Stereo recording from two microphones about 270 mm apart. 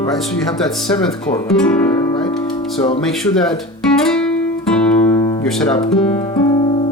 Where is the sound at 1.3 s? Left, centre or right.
Centre.